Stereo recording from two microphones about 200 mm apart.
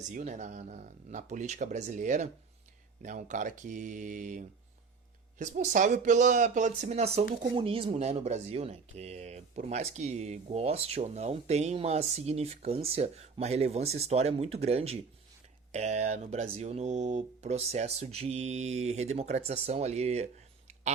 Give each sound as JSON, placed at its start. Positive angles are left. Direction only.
{"t": 0.1, "sound": "speech", "side_deg": -40}